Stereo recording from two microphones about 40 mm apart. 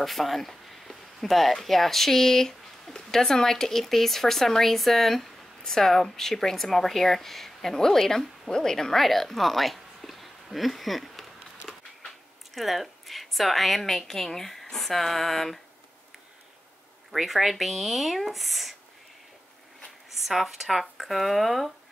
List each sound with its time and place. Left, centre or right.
0.0 s a woman's voice: centre
17.1 s a woman's voice: centre
20.1 s a woman's voice: centre